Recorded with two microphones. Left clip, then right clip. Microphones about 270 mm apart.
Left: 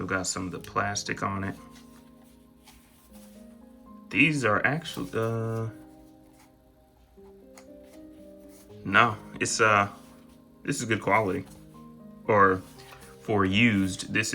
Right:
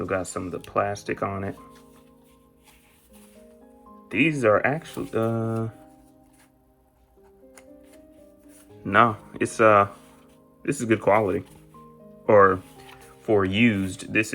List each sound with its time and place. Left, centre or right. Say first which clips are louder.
0.0 s speech: right 3 dB; centre
4.4 s speech: right 5 dB; centre
8.8 s speech: right 3 dB; centre